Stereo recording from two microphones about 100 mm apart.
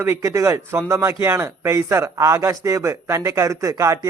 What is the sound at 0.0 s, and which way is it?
Speech, 30° right (ahead or behind).